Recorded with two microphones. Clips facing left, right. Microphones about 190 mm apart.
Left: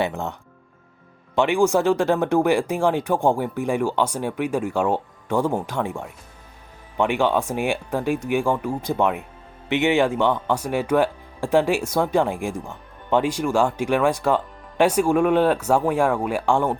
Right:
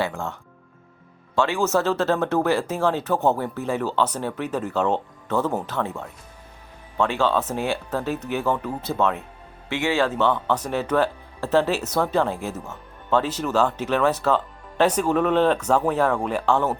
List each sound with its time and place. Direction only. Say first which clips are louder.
0.0 s speech: left 2 dB; 20° left (ahead or behind)
1.4 s speech: left 3 dB; 15° left (ahead or behind)